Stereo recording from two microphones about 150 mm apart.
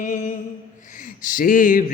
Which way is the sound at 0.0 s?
60° left (ahead or behind).